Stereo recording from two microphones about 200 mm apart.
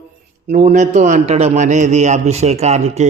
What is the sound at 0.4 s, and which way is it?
A man's voice, 35° right (ahead or behind).